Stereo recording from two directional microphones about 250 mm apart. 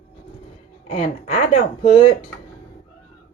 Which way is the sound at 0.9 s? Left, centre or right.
Left.